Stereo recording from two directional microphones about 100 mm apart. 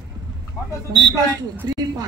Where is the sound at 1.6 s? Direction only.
40° right (ahead or behind).